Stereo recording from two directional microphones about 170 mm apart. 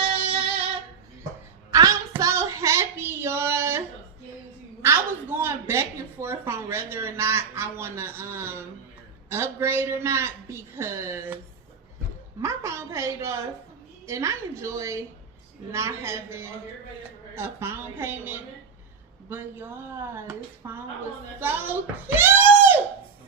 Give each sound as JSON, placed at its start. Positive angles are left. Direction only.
{"t": 0.0, "sound": "music", "side_deg": -35}
{"t": 1.7, "sound": "a sound", "side_deg": -20}
{"t": 9.3, "sound": "a woman's voice", "side_deg": -15}
{"t": 12.4, "sound": "a woman's voice", "side_deg": -15}